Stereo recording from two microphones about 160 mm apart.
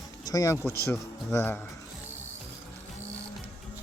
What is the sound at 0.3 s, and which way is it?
Speech, 20° left (ahead or behind).